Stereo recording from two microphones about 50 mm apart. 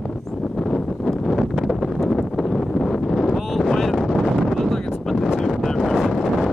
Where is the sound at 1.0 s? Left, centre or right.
Centre.